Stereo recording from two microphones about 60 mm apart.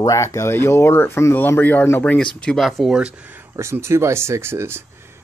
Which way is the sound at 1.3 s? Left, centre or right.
Left.